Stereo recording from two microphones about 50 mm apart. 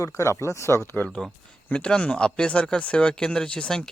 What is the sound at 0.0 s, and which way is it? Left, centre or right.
Speech, left.